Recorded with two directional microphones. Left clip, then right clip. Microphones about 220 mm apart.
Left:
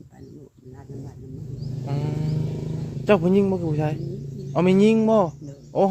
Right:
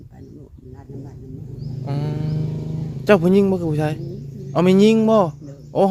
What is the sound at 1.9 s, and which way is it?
Speech, 10° right (ahead or behind).